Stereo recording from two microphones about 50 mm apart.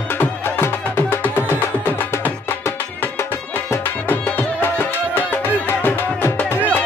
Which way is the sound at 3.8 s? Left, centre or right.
Left.